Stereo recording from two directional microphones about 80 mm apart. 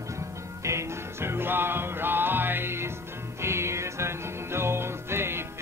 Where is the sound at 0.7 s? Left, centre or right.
Right.